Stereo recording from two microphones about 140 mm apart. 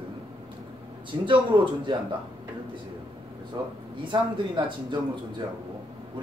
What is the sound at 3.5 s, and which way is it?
A man's voice, 30° right (ahead or behind).